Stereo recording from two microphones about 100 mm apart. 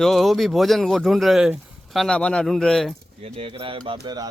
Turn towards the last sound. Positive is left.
turn(degrees=-40)  # may be behind; listen again after turning